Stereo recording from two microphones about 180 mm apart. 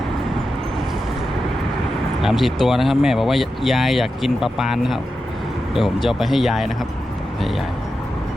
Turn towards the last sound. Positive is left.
turn(degrees=0)  # may be behind; listen again after turning